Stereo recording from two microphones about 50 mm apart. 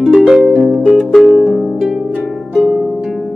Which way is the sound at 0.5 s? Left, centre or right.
Centre.